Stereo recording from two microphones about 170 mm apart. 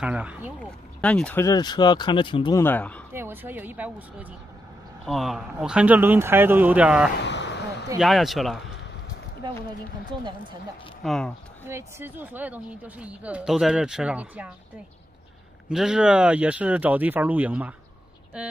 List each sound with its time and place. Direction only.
0.0 s speech: 5° right (ahead or behind)
0.6 s speech: 5° left (ahead or behind)
1.4 s speech: 25° left (ahead or behind)
2.5 s speech: 10° left (ahead or behind)
3.1 s speech: 15° right (ahead or behind)
7.2 s a sound: 90° left
8.0 s speech: centre (ahead or behind)
11.1 s speech: 5° left (ahead or behind)
11.6 s speech: 15° right (ahead or behind)
15.7 s speech: 5° right (ahead or behind)